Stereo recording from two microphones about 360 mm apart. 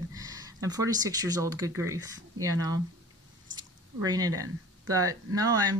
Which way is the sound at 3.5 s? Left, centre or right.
Centre.